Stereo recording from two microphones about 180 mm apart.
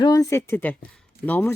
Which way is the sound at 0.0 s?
20° left (ahead or behind).